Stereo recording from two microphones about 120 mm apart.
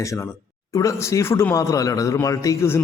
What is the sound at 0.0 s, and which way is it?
Speech, 25° left (ahead or behind).